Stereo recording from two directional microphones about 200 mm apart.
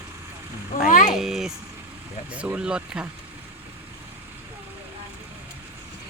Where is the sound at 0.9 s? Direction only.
40° left (ahead or behind).